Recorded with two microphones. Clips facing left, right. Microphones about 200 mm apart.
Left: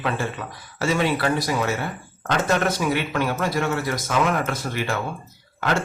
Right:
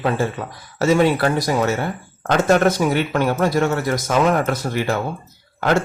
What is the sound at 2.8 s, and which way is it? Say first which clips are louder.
Speech: right 4 dB; 40° right (ahead or behind).